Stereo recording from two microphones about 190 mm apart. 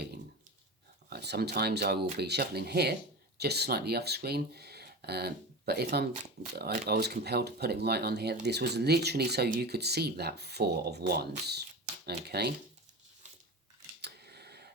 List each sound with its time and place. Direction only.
1.1 s speech: 60° right (ahead or behind)
14.0 s camera: 60° right (ahead or behind)